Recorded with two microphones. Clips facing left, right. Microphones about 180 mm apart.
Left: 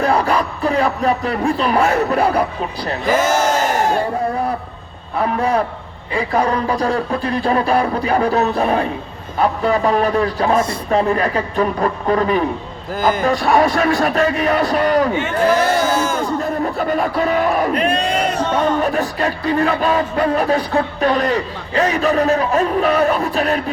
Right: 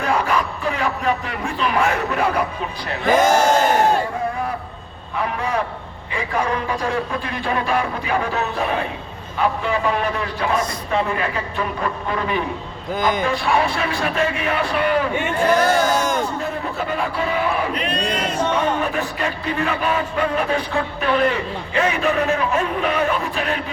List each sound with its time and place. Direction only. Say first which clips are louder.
0.0 s speech: left 4 dB; 35° left (ahead or behind)
3.1 s speech: right 1 dB; 5° left (ahead or behind)
5.2 s music: left 6 dB; 35° left (ahead or behind)
12.9 s speech: left 3 dB; 5° left (ahead or behind)
13.2 s music: left 5 dB; 40° left (ahead or behind)
15.4 s speech: left 1 dB; 5° left (ahead or behind)
16.9 s music: left 4 dB; 40° left (ahead or behind); by 18.4 s 55° left (ahead or behind)
18.5 s music: left 4 dB; 40° left (ahead or behind)